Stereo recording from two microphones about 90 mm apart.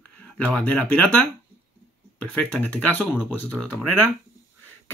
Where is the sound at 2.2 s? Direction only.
15° left (ahead or behind).